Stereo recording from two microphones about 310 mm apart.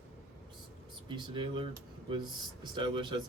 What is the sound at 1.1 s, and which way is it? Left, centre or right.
Speech, centre.